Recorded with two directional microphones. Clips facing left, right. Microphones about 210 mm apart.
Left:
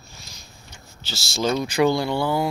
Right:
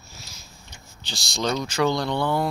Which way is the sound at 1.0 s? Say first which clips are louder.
Left 3 dB; 5° left (ahead or behind).